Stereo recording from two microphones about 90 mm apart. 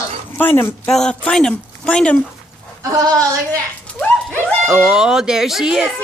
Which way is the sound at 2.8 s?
40° right (ahead or behind).